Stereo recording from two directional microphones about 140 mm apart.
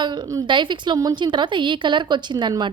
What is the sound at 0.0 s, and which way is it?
A woman's voice, 30° right (ahead or behind).